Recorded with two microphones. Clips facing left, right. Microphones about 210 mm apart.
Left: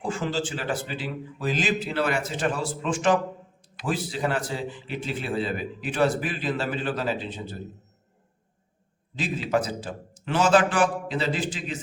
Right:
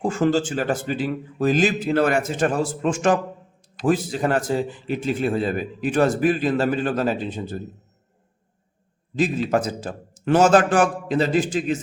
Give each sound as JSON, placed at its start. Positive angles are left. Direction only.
{"t": 0.0, "sound": "a man's voice", "side_deg": -45}
{"t": 9.1, "sound": "a man's voice", "side_deg": -45}